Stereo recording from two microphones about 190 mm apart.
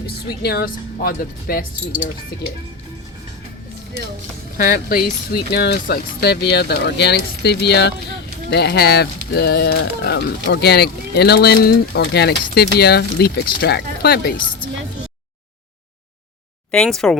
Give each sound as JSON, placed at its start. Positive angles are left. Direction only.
{"t": 0.4, "sound": "speech", "side_deg": 55}
{"t": 4.5, "sound": "speech", "side_deg": 50}
{"t": 16.7, "sound": "speech", "side_deg": 5}